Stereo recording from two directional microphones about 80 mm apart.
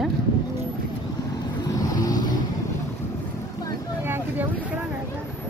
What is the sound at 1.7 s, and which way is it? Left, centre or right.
Vehicle, left.